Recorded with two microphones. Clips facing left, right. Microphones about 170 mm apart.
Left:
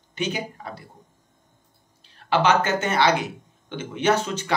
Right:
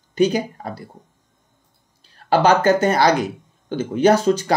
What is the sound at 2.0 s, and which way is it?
Speech, 40° right (ahead or behind).